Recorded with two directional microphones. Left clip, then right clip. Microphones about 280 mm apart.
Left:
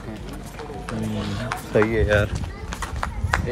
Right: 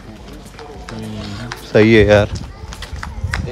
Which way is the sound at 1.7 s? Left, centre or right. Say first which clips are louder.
Right 8 dB; right.